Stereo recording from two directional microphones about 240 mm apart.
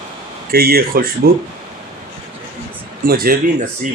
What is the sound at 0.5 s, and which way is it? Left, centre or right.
Speech, right.